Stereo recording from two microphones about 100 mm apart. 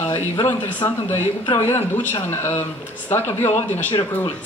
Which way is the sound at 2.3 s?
25° left (ahead or behind).